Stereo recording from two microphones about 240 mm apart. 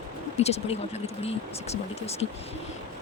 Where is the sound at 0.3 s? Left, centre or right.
Left.